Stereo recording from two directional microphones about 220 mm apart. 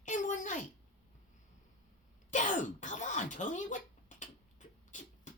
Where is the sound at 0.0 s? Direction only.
35° left (ahead or behind).